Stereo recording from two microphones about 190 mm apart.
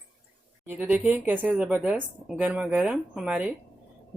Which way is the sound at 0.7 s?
10° right (ahead or behind).